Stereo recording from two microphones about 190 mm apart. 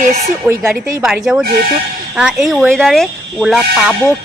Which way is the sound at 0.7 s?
50° right (ahead or behind).